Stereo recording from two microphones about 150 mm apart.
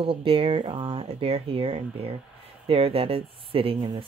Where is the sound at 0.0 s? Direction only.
35° right (ahead or behind).